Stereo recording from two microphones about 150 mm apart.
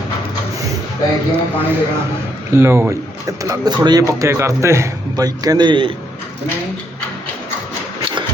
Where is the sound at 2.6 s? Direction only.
20° right (ahead or behind).